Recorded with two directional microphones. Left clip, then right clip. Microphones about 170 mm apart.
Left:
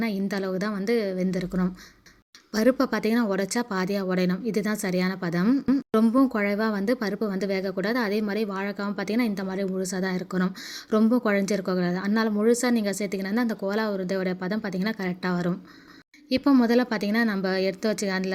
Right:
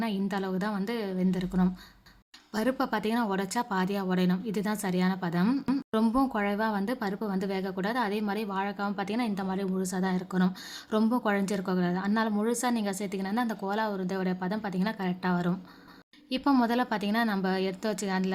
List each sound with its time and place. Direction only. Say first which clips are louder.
0.0 s a woman's voice: left 3 dB; 20° left (ahead or behind)